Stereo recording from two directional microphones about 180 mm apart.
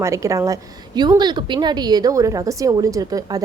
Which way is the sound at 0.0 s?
15° right (ahead or behind).